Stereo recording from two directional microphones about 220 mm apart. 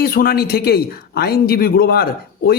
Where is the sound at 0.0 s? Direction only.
45° left (ahead or behind).